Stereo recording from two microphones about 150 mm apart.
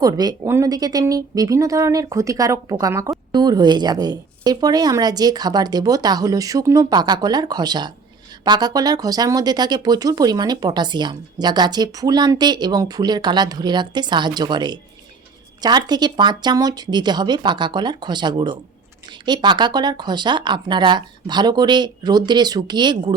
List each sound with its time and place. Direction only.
0.0 s speech: 25° right (ahead or behind)